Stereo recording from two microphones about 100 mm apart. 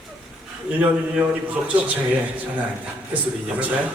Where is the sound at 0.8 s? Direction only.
10° right (ahead or behind).